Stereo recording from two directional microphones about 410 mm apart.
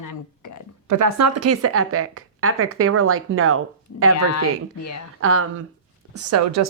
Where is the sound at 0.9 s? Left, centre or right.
Right.